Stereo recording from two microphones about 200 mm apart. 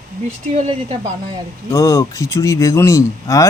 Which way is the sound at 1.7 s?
15° left (ahead or behind).